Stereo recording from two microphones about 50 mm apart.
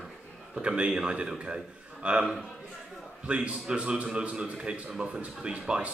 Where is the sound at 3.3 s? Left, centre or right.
Right.